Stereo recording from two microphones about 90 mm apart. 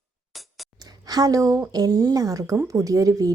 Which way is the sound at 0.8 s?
45° right (ahead or behind).